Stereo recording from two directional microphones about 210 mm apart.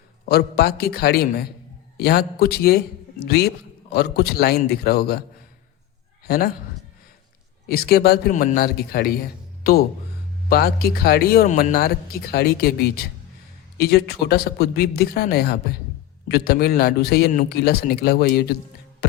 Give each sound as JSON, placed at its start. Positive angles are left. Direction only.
{"t": 0.3, "sound": "speech", "side_deg": 50}
{"t": 6.2, "sound": "a man's voice", "side_deg": 50}
{"t": 7.7, "sound": "speech", "side_deg": 45}